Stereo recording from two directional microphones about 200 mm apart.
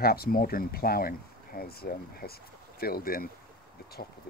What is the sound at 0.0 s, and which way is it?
Speech, 50° left (ahead or behind).